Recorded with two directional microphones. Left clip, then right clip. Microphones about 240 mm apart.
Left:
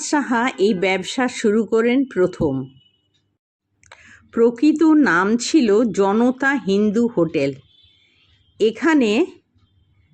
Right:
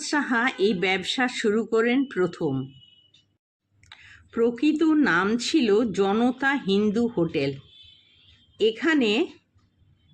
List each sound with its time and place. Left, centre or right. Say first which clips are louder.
0.0 s speech: left 4 dB; centre
3.8 s speech: left 3 dB; centre